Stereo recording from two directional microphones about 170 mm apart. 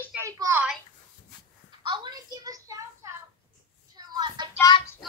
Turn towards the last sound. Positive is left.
turn(degrees=25)  # may be behind; listen again after turning